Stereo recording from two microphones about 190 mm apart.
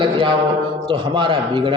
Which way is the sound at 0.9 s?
25° right (ahead or behind).